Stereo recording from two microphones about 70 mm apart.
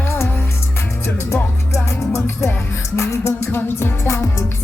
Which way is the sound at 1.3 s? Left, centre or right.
Left.